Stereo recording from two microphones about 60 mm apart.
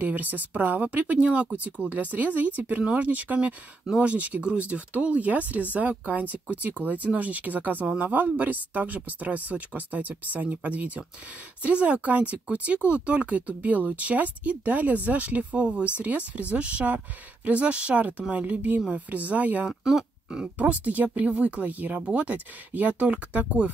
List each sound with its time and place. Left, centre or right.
0.0 s speech: right
19.8 s speech: centre
20.5 s speech: right